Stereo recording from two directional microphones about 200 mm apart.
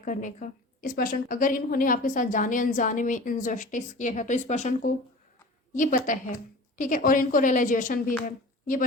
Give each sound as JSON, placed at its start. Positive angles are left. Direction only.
{"t": 0.0, "sound": "a woman's voice", "side_deg": 40}